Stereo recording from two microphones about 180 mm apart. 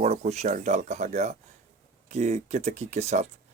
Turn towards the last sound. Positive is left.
turn(degrees=-35)  # may be behind; listen again after turning